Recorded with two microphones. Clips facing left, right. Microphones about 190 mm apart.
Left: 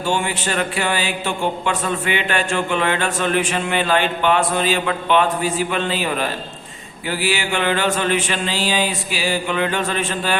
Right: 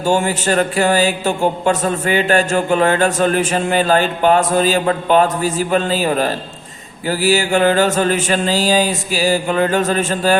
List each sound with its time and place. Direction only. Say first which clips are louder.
0.0 s speech: right 5 dB; 40° right (ahead or behind)